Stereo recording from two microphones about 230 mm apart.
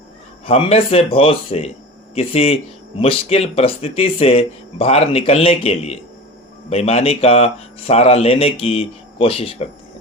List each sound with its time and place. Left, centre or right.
0.4 s speech: left